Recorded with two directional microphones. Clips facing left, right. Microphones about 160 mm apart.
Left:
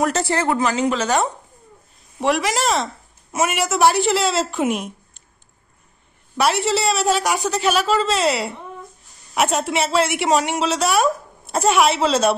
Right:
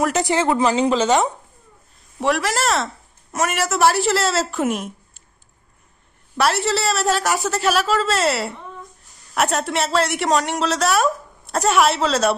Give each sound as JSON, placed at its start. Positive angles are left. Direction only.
{"t": 0.1, "sound": "a woman's voice", "side_deg": -15}
{"t": 0.6, "sound": "a woman's voice", "side_deg": -30}
{"t": 2.1, "sound": "a woman's voice", "side_deg": 0}
{"t": 6.3, "sound": "a woman's voice", "side_deg": 0}